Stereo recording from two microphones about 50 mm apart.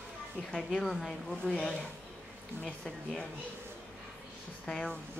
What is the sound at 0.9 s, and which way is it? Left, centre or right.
Speech, centre.